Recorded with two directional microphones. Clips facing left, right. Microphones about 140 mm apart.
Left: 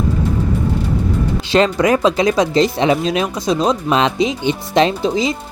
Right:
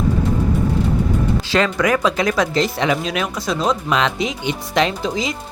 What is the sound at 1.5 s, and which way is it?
Speech, 25° left (ahead or behind).